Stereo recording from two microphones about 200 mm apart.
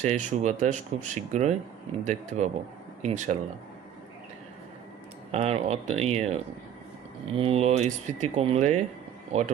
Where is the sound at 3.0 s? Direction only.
35° right (ahead or behind).